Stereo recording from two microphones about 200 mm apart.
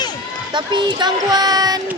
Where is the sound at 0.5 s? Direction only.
25° right (ahead or behind).